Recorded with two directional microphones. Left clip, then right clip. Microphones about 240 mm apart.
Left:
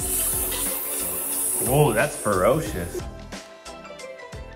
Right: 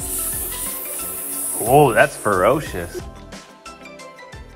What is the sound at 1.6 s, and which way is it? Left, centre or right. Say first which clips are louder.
Speech: right 8 dB; centre.